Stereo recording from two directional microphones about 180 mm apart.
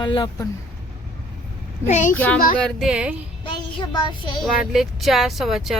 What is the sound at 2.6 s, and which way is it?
Speech, centre (ahead or behind).